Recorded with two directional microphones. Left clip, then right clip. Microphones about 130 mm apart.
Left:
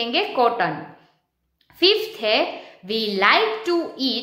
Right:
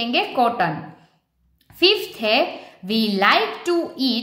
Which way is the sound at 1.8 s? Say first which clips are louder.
Right 1 dB; 40° right (ahead or behind).